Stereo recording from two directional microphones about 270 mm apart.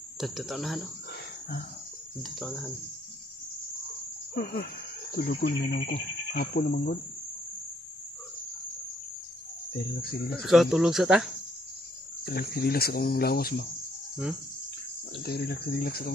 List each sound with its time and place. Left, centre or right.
0.2 s speech: centre
2.3 s speech: centre
4.3 s cricket: left
5.1 s speech: left
10.4 s speech: centre
12.3 s speech: left
15.2 s speech: left